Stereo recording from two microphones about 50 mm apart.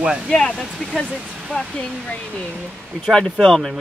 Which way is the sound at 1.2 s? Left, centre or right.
Right.